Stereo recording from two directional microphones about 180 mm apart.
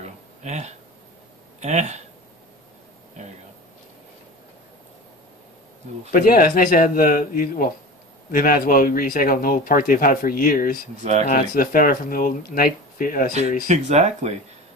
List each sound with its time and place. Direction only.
0.0 s a sound: 40° right (ahead or behind)
1.6 s speech: 40° right (ahead or behind)
6.1 s speech: 55° left (ahead or behind)
11.0 s speech: 40° right (ahead or behind)
11.2 s speech: 50° left (ahead or behind)
13.7 s speech: 40° right (ahead or behind)